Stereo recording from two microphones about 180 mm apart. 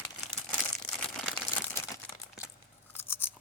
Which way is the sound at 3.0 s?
10° left (ahead or behind).